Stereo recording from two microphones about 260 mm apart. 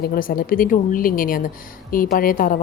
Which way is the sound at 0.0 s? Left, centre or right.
Left.